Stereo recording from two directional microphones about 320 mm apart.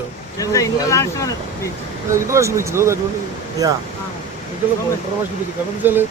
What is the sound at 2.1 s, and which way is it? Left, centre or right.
Speech, centre.